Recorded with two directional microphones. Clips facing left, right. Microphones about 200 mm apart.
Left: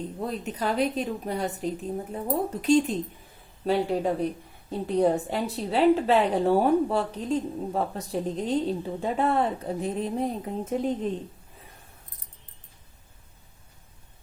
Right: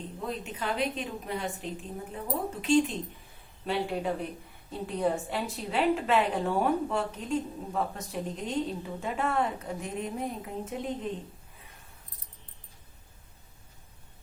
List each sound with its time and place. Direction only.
0.3 s a woman's voice: 40° left (ahead or behind)